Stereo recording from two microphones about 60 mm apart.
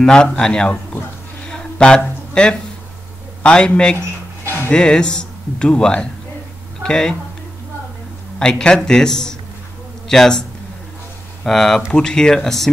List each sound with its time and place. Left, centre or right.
0.0 s speech: centre
1.4 s a sound: centre
2.4 s speech: centre
8.4 s speech: centre
11.4 s speech: centre